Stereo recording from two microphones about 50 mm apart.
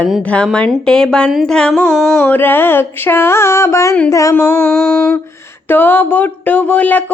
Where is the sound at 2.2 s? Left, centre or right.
Left.